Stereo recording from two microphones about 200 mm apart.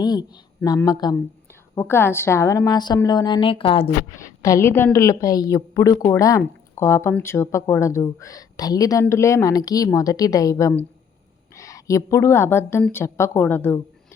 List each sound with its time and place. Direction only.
0.0 s a woman's voice: 20° left (ahead or behind)
4.2 s speech: 15° left (ahead or behind)